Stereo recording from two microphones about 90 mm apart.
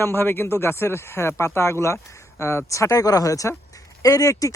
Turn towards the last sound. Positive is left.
turn(degrees=40)  # may be behind; listen again after turning